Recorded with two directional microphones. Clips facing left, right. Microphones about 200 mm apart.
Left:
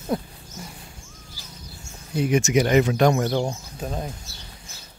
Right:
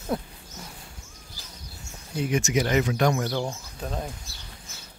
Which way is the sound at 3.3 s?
20° left (ahead or behind).